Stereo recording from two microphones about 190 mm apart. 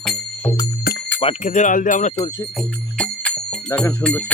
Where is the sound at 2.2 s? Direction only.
20° left (ahead or behind).